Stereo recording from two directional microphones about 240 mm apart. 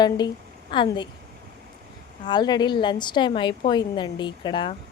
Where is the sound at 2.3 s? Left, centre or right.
Centre.